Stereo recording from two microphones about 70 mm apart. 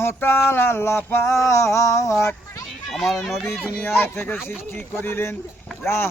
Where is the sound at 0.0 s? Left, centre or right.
Left.